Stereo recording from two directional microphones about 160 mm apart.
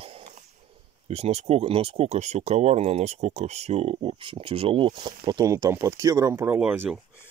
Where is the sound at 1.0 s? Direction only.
40° right (ahead or behind); by 6.9 s 10° right (ahead or behind).